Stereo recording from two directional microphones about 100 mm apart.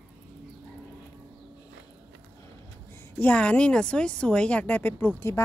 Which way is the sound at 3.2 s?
15° left (ahead or behind).